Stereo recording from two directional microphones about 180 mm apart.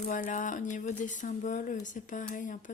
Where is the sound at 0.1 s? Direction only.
45° left (ahead or behind).